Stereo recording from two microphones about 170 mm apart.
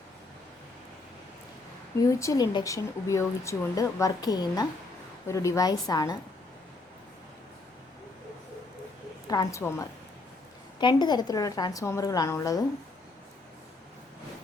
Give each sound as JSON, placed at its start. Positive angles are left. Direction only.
{"t": 2.0, "sound": "speech", "side_deg": 20}
{"t": 9.2, "sound": "a woman's voice", "side_deg": 20}